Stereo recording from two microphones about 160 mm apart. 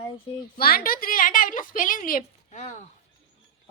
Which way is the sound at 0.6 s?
70° left (ahead or behind).